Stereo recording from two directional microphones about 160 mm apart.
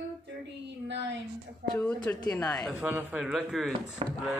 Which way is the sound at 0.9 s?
90° right.